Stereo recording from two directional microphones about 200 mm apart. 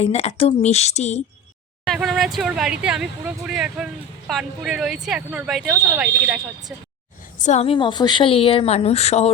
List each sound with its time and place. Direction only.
0.0 s a woman's voice: 30° left (ahead or behind)
1.8 s speech: centre (ahead or behind)
7.3 s a woman's voice: 35° left (ahead or behind)